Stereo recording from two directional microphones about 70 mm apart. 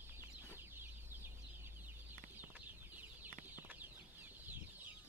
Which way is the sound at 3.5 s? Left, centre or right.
Right.